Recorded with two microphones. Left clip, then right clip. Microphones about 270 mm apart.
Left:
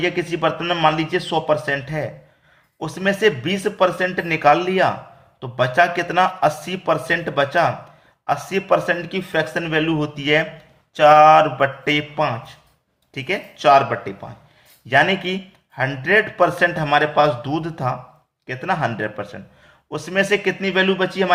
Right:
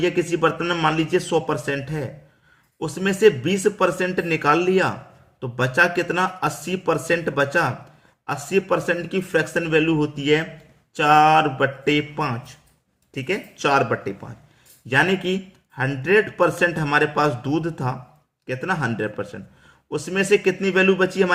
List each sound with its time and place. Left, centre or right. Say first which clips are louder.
0.2 s speech: even; centre